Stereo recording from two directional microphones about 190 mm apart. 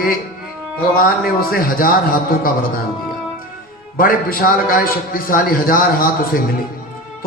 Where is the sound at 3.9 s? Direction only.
50° left (ahead or behind).